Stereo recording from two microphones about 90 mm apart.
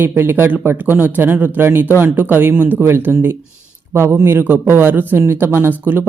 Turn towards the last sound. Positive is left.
turn(degrees=-20)  # may be behind; listen again after turning